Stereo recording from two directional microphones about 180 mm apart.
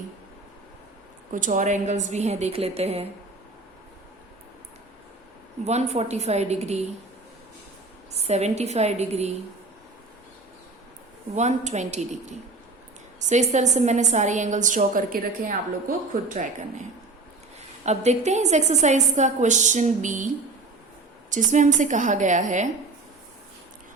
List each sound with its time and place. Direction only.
1.3 s a woman's voice: 45° right (ahead or behind)
5.6 s a woman's voice: 40° right (ahead or behind)
8.2 s a woman's voice: 40° right (ahead or behind)
11.3 s a woman's voice: 40° right (ahead or behind)
17.8 s a woman's voice: 40° right (ahead or behind)